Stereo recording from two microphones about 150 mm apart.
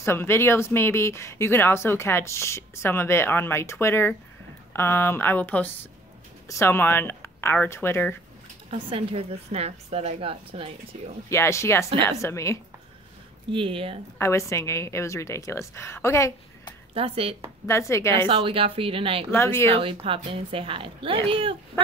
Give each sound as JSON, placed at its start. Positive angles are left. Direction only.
{"t": 0.0, "sound": "speech", "side_deg": 15}
{"t": 8.8, "sound": "a woman's voice", "side_deg": -40}
{"t": 11.2, "sound": "a woman's voice", "side_deg": 20}
{"t": 13.5, "sound": "a woman's voice", "side_deg": -35}
{"t": 14.1, "sound": "a woman's voice", "side_deg": 20}
{"t": 16.9, "sound": "a woman's voice", "side_deg": -40}
{"t": 17.6, "sound": "speech", "side_deg": 20}
{"t": 18.2, "sound": "a woman's voice", "side_deg": -35}
{"t": 19.3, "sound": "speech", "side_deg": 15}
{"t": 19.7, "sound": "a woman's voice", "side_deg": -40}